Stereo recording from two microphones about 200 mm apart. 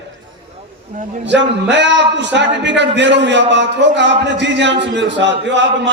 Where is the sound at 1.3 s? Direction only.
60° right (ahead or behind).